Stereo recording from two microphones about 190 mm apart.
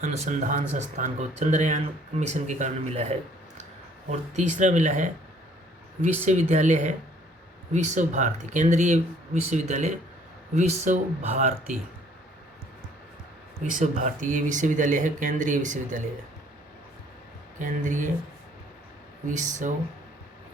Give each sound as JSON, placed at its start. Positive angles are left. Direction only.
{"t": 0.0, "sound": "speech", "side_deg": -40}
{"t": 6.5, "sound": "speech", "side_deg": -40}
{"t": 13.7, "sound": "speech", "side_deg": -40}
{"t": 17.6, "sound": "speech", "side_deg": -40}
{"t": 19.3, "sound": "speech", "side_deg": -40}